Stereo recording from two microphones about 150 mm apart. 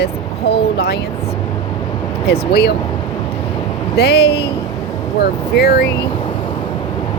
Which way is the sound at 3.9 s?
90° left.